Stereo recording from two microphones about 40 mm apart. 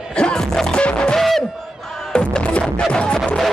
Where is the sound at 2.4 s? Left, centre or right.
Left.